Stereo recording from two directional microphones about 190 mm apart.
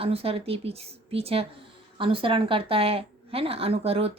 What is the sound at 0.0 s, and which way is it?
Speech, 30° right (ahead or behind).